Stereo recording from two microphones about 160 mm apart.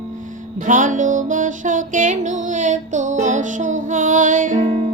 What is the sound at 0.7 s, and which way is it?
Music, 55° right (ahead or behind).